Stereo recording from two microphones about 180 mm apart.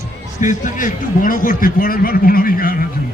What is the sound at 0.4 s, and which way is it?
A man's voice, 45° left (ahead or behind).